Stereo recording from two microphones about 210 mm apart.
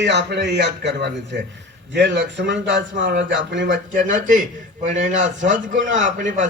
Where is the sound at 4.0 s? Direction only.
40° right (ahead or behind).